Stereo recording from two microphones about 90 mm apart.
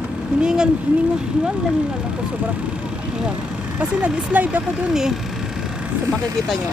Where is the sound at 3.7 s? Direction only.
15° right (ahead or behind).